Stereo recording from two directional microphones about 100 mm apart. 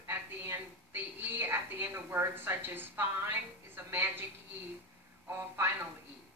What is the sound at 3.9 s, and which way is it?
Speech, 20° right (ahead or behind).